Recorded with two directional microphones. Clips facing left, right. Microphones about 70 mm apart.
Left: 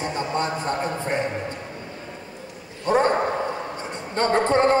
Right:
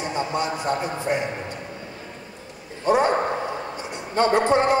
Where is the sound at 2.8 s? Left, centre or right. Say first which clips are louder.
Right 1 dB; centre.